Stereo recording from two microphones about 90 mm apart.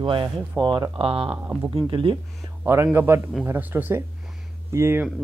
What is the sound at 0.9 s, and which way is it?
Speech, 90° right.